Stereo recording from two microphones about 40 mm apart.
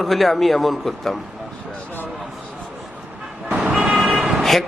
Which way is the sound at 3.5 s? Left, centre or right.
Right.